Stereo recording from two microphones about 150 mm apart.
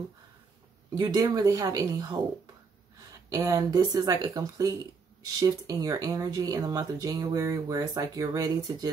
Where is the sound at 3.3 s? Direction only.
25° right (ahead or behind).